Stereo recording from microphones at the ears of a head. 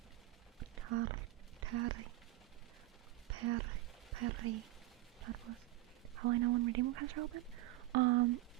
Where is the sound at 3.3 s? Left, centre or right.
Right.